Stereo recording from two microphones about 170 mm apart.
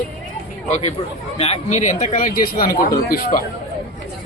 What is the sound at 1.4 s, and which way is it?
Speech, 40° left (ahead or behind).